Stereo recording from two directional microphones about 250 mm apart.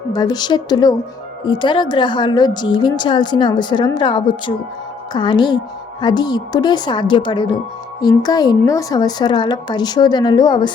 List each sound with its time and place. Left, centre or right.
0.1 s a woman's voice: centre